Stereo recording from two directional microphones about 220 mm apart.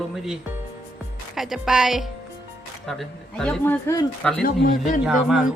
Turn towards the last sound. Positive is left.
turn(degrees=-5)  # may be behind; listen again after turning